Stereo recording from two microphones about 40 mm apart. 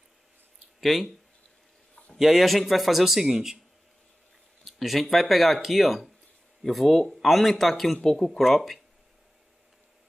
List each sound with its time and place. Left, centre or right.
0.7 s speech: centre
2.1 s speech: centre
4.6 s speech: centre